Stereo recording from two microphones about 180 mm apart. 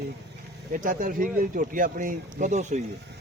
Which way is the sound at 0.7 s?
45° right (ahead or behind).